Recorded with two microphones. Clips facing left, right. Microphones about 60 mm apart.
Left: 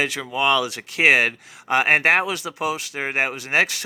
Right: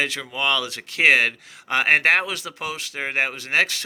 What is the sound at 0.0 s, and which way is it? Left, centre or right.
Speech, centre.